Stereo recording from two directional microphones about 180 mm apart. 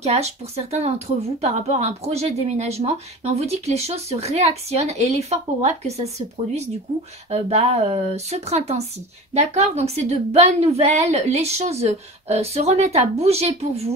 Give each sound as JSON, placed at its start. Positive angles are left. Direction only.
{"t": 0.0, "sound": "speech", "side_deg": -35}